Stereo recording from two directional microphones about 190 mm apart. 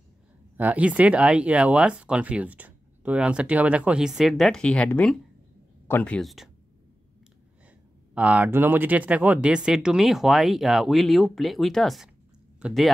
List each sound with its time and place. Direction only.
0.6 s speech: 10° right (ahead or behind)
8.1 s speech: 5° right (ahead or behind)